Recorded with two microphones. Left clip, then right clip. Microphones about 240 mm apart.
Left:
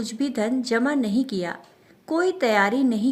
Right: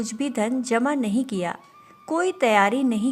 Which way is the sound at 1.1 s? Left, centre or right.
Right.